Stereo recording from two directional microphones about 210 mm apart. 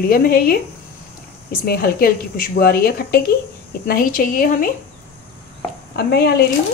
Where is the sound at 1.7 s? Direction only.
45° left (ahead or behind).